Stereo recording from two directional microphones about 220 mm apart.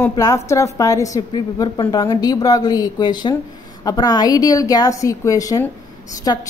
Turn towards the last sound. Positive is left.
turn(degrees=15)  # may be behind; listen again after turning